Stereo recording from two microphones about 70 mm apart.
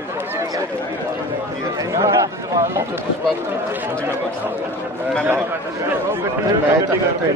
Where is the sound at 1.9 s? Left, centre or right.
Right.